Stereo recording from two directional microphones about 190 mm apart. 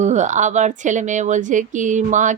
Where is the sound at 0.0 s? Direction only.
40° right (ahead or behind).